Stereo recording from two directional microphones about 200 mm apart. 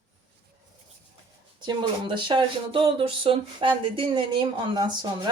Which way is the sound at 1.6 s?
25° right (ahead or behind).